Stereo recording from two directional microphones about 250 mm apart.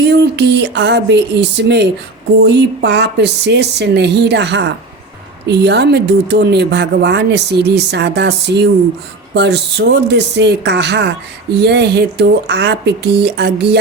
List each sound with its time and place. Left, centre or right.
0.0 s speech: right